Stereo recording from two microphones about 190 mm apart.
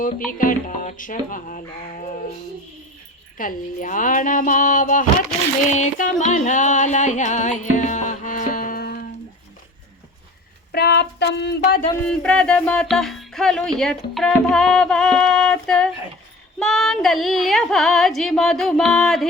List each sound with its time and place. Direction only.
0.3 s speech: 45° left (ahead or behind)
3.3 s speech: 45° left (ahead or behind)
5.6 s music: 40° left (ahead or behind); by 9.0 s 55° left (ahead or behind)
10.7 s a sound: 60° left (ahead or behind)
12.0 s speech: 5° left (ahead or behind)